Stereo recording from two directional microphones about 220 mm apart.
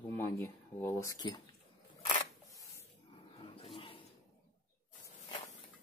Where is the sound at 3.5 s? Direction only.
25° left (ahead or behind).